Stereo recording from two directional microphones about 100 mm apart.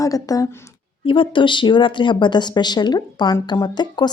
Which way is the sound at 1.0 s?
60° left (ahead or behind).